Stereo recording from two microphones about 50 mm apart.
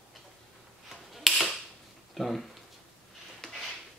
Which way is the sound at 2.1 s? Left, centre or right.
Centre.